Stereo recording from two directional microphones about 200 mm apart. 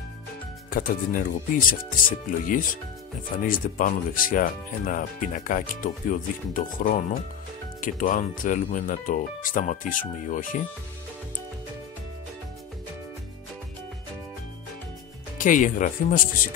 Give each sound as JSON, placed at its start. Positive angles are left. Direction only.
{"t": 0.7, "sound": "speech", "side_deg": 45}
{"t": 15.3, "sound": "speech", "side_deg": 40}